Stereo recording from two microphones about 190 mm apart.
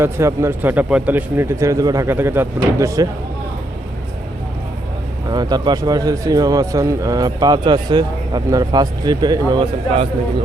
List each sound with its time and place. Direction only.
0.0 s a man's voice: 15° right (ahead or behind)
5.3 s a man's voice: 20° right (ahead or behind)